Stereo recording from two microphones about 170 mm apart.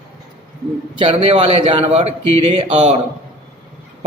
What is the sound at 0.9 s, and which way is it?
A man's voice, 35° right (ahead or behind).